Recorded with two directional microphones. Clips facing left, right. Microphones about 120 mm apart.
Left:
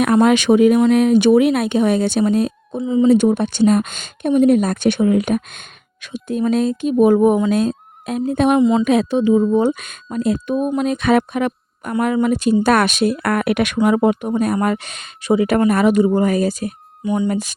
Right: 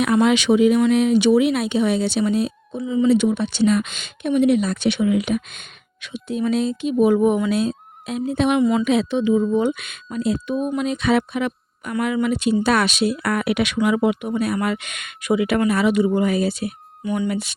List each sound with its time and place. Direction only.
0.0 s speech: 50° left (ahead or behind)
2.8 s speech: 30° left (ahead or behind)
3.1 s speech: 45° left (ahead or behind)